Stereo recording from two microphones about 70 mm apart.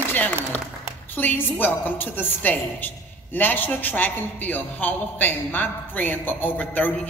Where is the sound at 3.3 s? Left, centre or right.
Left.